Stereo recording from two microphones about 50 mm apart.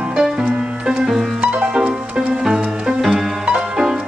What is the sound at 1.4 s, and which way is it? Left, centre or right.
Music, right.